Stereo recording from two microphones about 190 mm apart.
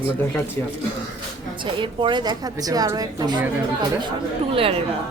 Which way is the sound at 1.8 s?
25° right (ahead or behind).